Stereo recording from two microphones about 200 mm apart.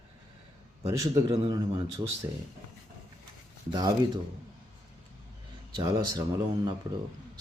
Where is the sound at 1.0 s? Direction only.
20° right (ahead or behind).